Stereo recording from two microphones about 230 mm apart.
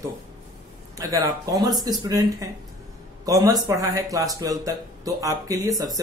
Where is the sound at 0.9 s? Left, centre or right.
Centre.